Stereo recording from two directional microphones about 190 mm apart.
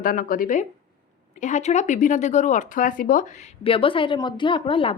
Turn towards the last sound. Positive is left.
turn(degrees=30)  # may be behind; listen again after turning